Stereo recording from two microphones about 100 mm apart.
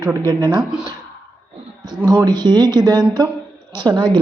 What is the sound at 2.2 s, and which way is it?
Speech, 45° right (ahead or behind).